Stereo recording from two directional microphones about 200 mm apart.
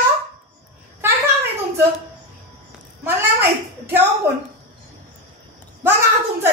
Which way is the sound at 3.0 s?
10° right (ahead or behind).